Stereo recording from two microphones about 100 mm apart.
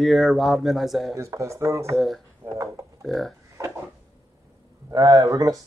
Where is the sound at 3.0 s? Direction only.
Centre (ahead or behind).